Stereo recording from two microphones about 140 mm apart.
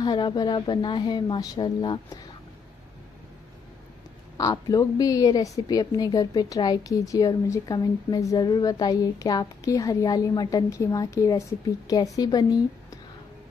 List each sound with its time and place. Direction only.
0.0 s speech: 30° left (ahead or behind)
4.4 s a woman's voice: 25° left (ahead or behind)